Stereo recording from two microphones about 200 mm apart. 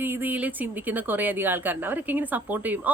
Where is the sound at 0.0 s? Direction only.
10° right (ahead or behind).